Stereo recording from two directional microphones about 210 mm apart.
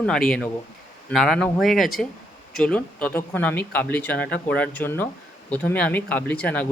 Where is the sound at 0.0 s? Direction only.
5° left (ahead or behind).